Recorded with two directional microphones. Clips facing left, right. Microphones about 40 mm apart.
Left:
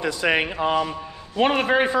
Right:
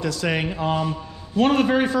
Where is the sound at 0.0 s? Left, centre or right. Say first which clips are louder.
Left 2 dB; left.